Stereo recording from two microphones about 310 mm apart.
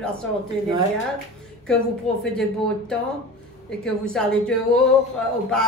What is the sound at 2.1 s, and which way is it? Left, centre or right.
Speech, centre.